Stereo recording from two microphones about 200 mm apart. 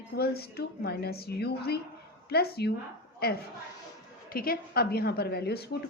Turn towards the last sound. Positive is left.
turn(degrees=55)  # may be behind; listen again after turning